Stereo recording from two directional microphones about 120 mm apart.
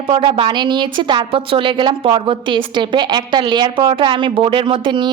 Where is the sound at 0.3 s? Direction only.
40° right (ahead or behind).